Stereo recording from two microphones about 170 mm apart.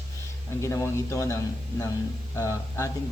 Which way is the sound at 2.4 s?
15° left (ahead or behind).